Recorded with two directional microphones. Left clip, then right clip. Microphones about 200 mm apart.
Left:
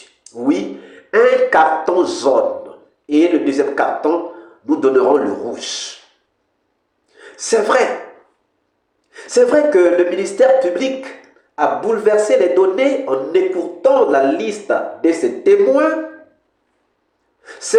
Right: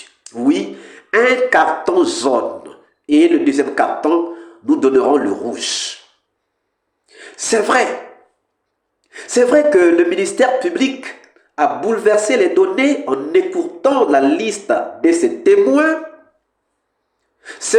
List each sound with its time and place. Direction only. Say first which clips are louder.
0.3 s speech: right 1 dB; 40° right (ahead or behind)
7.1 s a sound: left 1 dB; 35° right (ahead or behind)
9.0 s speech: left 1 dB; 35° right (ahead or behind)